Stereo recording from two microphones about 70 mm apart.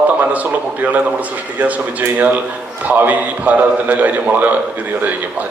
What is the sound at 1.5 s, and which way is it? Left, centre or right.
A man's voice, right.